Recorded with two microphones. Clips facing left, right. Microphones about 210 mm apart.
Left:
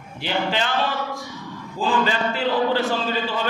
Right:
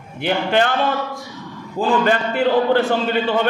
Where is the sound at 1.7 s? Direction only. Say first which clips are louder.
Right 5 dB; 55° right (ahead or behind).